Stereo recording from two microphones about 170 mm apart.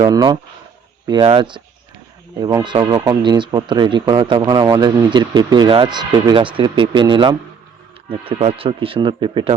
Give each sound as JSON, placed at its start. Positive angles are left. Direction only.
{"t": 0.0, "sound": "speech", "side_deg": -25}